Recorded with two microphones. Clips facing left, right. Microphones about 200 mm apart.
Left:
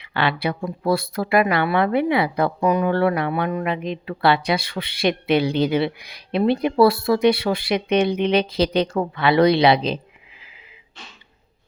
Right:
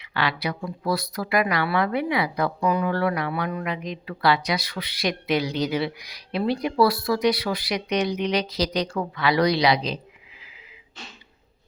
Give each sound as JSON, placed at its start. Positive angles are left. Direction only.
{"t": 0.0, "sound": "speech", "side_deg": 25}